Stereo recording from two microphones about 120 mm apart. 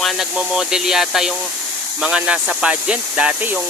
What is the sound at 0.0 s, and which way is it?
Speech, 5° right (ahead or behind).